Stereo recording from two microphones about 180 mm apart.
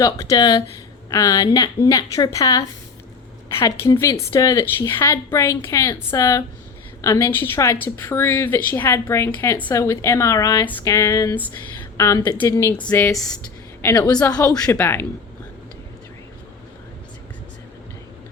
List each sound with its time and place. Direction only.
0.0 s a woman's voice: 20° left (ahead or behind)